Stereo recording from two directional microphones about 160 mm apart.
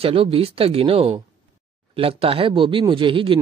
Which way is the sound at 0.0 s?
35° right (ahead or behind).